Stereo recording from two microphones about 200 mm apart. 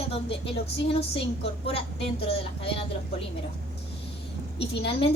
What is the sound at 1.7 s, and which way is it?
A woman's voice, 30° left (ahead or behind).